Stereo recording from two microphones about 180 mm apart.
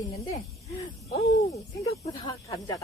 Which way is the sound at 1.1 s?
35° left (ahead or behind).